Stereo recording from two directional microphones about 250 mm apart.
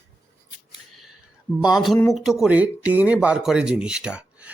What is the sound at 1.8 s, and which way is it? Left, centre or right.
Speech, centre.